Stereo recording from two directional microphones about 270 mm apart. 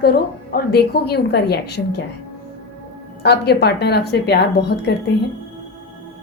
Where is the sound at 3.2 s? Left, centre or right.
Left.